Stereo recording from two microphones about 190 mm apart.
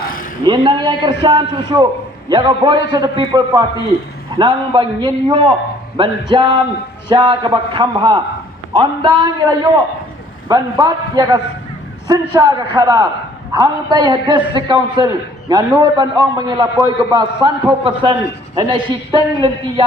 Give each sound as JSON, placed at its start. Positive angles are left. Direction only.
{"t": 0.4, "sound": "a man's voice", "side_deg": -25}